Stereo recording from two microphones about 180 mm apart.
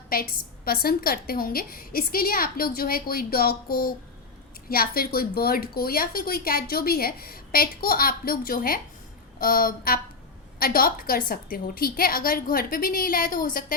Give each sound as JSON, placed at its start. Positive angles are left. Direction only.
{"t": 0.1, "sound": "a woman's voice", "side_deg": 55}